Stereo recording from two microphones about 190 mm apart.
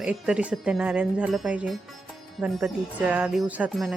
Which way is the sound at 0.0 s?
5° right (ahead or behind).